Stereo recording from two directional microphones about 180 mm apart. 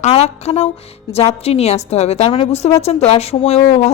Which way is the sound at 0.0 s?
35° left (ahead or behind).